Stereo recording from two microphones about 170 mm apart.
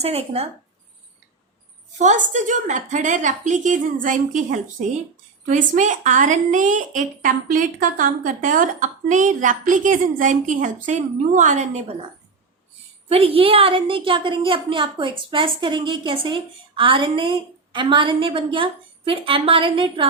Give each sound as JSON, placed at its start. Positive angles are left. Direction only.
{"t": 0.0, "sound": "a woman's voice", "side_deg": -35}
{"t": 2.0, "sound": "a woman's voice", "side_deg": -45}
{"t": 5.5, "sound": "a woman's voice", "side_deg": -45}
{"t": 13.1, "sound": "a woman's voice", "side_deg": -35}